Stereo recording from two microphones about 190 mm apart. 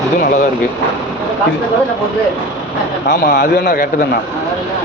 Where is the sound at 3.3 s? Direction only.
60° left (ahead or behind).